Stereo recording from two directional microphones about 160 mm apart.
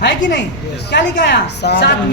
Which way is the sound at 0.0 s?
90° left.